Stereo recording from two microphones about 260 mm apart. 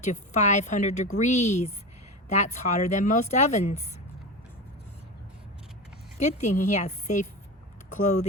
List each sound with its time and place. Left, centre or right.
0.0 s a woman's voice: left
6.1 s a woman's voice: left